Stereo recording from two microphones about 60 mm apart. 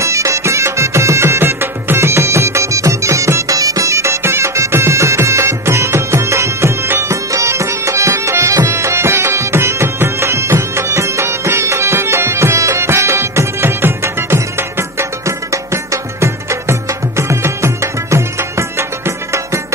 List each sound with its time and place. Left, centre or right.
0.0 s music: right
3.5 s music: right